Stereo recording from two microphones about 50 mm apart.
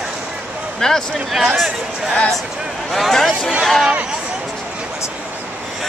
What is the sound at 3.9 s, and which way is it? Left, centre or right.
Speech, right.